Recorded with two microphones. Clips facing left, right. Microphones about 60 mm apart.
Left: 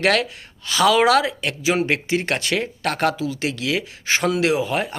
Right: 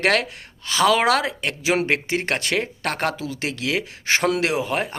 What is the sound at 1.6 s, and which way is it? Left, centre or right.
Speech, right.